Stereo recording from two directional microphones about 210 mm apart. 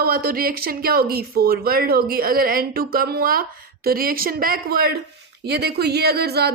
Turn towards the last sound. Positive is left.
turn(degrees=-50)  # may be behind; listen again after turning